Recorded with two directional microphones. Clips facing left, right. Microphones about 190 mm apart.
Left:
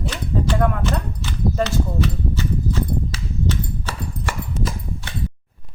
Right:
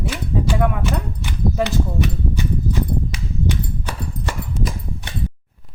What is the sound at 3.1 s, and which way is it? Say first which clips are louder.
Clip-clop: right 1 dB; 15° right (ahead or behind).